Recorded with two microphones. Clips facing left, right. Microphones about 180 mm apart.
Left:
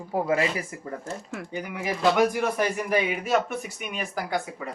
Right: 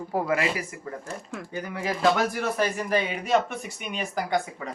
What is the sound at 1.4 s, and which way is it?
Speech, 15° left (ahead or behind).